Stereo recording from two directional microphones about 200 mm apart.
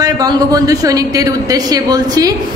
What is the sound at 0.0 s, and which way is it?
A woman's voice, 20° right (ahead or behind).